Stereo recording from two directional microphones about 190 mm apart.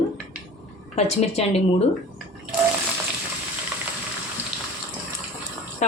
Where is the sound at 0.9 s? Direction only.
35° left (ahead or behind).